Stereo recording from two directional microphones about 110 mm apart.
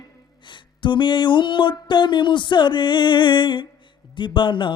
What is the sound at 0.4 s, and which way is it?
Mantra, 45° left (ahead or behind).